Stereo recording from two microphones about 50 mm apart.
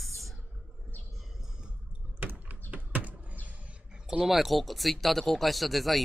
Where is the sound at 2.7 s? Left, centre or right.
Right.